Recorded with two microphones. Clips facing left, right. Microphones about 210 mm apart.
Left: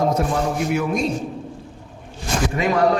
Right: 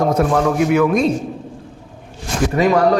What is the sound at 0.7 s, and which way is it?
Speech, 90° right.